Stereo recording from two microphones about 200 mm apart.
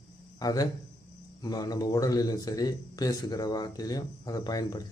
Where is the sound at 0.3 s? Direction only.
20° left (ahead or behind).